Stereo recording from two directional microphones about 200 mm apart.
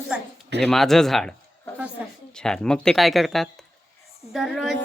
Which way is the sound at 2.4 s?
5° left (ahead or behind).